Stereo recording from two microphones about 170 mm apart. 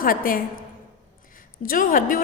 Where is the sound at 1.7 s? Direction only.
55° left (ahead or behind).